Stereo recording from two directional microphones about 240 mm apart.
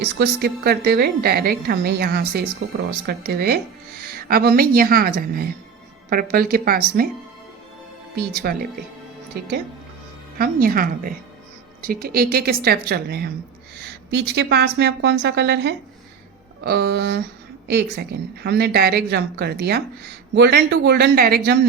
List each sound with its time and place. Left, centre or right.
0.0 s a woman's voice: right
8.1 s a woman's voice: right
10.3 s a woman's voice: right